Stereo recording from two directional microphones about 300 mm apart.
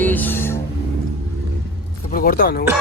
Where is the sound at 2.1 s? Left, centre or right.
Left.